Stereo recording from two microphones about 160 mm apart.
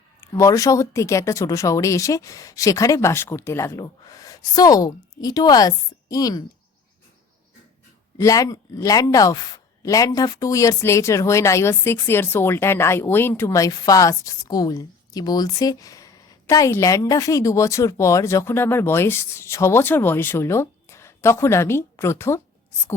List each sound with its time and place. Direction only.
0.2 s speech: 20° left (ahead or behind)
8.2 s speech: 20° left (ahead or behind)